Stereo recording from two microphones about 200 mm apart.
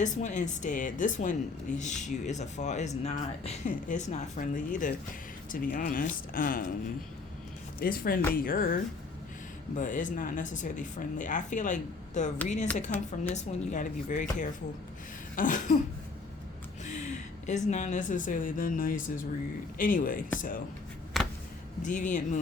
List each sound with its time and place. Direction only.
0.0 s speech: 35° left (ahead or behind)
7.8 s speech: 45° left (ahead or behind)
15.4 s speech: 40° left (ahead or behind)
16.8 s speech: 35° left (ahead or behind)
21.2 s a sound: centre (ahead or behind)
21.8 s speech: 40° left (ahead or behind)